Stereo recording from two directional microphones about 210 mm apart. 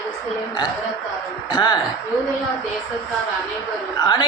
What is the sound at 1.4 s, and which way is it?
Speech, 20° left (ahead or behind).